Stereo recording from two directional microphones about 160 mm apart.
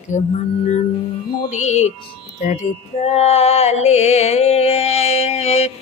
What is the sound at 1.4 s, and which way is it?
Music, 50° left (ahead or behind).